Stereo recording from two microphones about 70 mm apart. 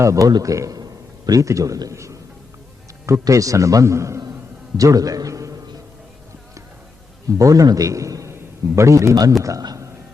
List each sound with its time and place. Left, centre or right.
0.0 s a man's voice: right
0.3 s a man's voice: right
4.8 s a man's voice: right
7.3 s a man's voice: right